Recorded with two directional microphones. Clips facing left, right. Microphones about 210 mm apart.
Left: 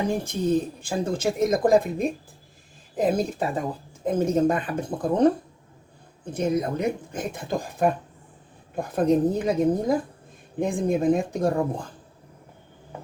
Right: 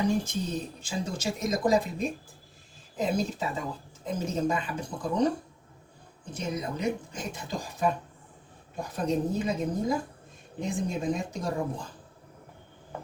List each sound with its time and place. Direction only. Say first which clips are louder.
0.8 s speech: left 7 dB; 55° left (ahead or behind)
6.3 s a woman's voice: left 9 dB; 55° left (ahead or behind)